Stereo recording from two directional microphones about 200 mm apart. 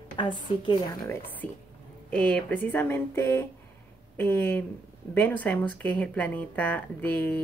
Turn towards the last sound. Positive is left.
turn(degrees=10)  # may be behind; listen again after turning